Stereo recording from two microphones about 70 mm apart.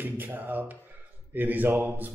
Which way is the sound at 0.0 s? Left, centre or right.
Right.